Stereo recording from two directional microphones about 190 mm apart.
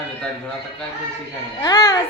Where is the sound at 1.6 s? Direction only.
20° left (ahead or behind).